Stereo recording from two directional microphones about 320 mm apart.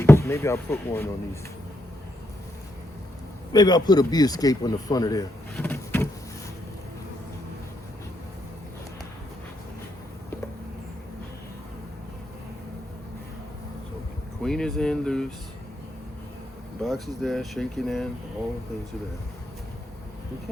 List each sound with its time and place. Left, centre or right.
0.0 s speech: centre
3.5 s speech: centre
14.4 s speech: centre
16.8 s speech: centre